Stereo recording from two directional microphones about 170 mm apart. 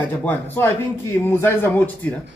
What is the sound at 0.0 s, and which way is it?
Speech, 10° left (ahead or behind).